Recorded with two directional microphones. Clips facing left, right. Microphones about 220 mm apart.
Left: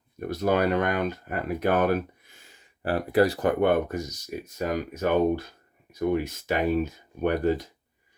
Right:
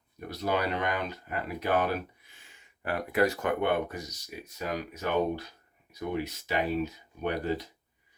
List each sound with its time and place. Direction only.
0.3 s speech: 50° left (ahead or behind)